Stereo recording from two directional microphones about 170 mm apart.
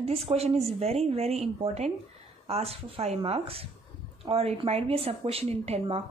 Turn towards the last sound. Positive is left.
turn(degrees=-35)  # may be behind; listen again after turning